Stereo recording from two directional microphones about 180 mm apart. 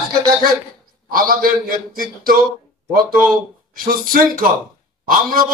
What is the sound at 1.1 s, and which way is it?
Speech, 55° right (ahead or behind).